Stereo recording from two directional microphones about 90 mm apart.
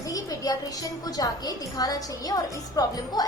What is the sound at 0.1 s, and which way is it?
A woman's voice, 45° left (ahead or behind).